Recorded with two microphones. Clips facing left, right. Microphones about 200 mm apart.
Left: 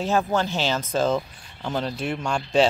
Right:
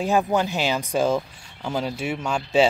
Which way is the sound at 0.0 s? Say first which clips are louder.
Right 2 dB; 15° right (ahead or behind).